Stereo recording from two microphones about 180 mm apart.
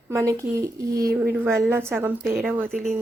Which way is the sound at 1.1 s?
5° right (ahead or behind).